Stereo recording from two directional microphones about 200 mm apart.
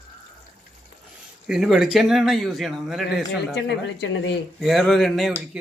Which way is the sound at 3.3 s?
60° left (ahead or behind).